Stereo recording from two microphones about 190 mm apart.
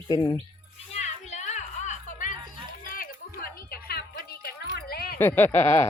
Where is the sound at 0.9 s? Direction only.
35° left (ahead or behind).